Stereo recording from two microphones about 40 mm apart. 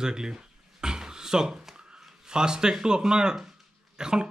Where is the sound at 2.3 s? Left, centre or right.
Centre.